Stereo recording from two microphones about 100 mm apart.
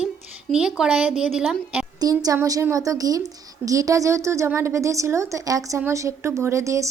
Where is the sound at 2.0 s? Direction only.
40° right (ahead or behind).